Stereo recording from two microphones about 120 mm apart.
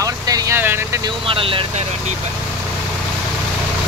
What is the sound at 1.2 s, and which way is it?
Speech, 50° right (ahead or behind).